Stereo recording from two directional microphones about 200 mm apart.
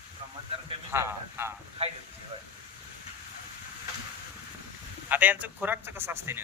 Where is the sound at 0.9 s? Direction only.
10° right (ahead or behind).